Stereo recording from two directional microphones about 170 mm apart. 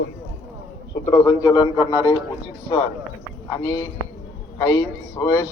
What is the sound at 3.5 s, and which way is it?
A woman's voice, 20° left (ahead or behind).